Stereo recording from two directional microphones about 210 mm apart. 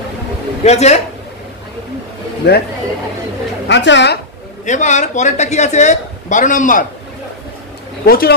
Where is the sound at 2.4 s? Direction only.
55° left (ahead or behind).